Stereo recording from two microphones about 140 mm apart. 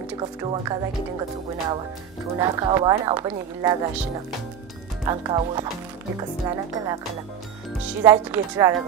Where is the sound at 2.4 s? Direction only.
25° right (ahead or behind).